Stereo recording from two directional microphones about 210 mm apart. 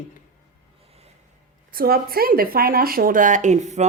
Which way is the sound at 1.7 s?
45° right (ahead or behind).